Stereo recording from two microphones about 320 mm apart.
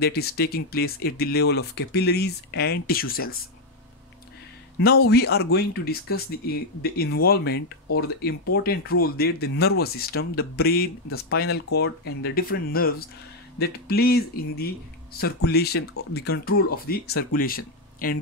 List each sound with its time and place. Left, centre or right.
0.0 s speech: left
4.7 s speech: left